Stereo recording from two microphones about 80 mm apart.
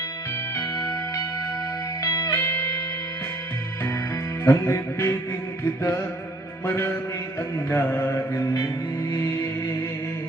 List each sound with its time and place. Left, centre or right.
2.0 s music: left
2.3 s music: left
4.4 s music: left
6.7 s music: left
7.7 s mantra: left
9.1 s music: left